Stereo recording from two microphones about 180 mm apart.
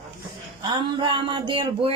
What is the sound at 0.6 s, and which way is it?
Speech, 25° right (ahead or behind).